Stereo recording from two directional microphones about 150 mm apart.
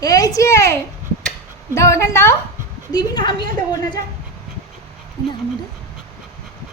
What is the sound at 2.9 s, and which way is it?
Speech, 30° left (ahead or behind).